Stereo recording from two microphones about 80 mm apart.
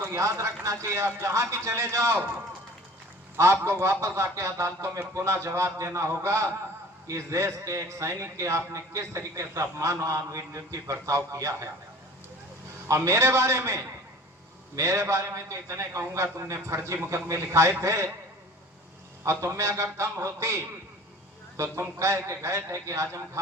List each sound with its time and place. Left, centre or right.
0.0 s a man's voice: right
3.3 s a man's voice: right
12.9 s a man's voice: right
19.2 s a man's voice: right